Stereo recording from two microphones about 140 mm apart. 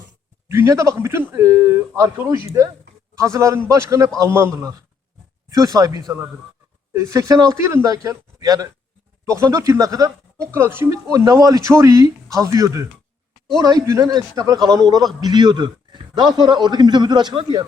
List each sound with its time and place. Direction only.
0.4 s a man's voice: 20° right (ahead or behind)